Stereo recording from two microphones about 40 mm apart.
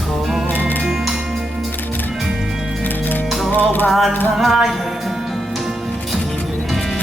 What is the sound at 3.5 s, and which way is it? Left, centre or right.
Music, left.